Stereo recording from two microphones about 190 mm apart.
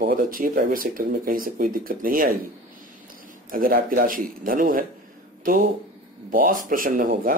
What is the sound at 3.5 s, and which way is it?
Speech, 50° right (ahead or behind).